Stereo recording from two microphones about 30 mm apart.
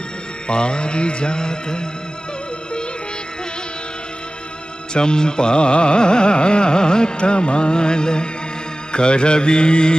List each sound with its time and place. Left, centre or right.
0.5 s carnatic music: left
4.9 s carnatic music: left